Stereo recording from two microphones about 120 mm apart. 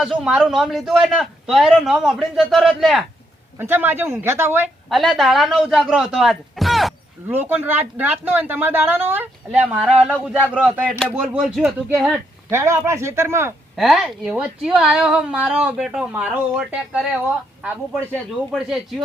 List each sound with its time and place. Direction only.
0.0 s a man's voice: centre (ahead or behind)
3.6 s a woman's voice: 15° right (ahead or behind)
4.9 s a man's voice: centre (ahead or behind)
7.3 s a woman's voice: 15° right (ahead or behind)
9.5 s a woman's voice: 5° right (ahead or behind)
11.3 s a man's voice: 5° right (ahead or behind)
12.5 s speech: 20° right (ahead or behind)
13.7 s a woman's voice: centre (ahead or behind)
18.5 s a man's voice: centre (ahead or behind)